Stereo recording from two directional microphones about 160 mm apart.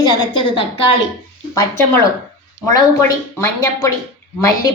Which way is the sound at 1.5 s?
20° left (ahead or behind).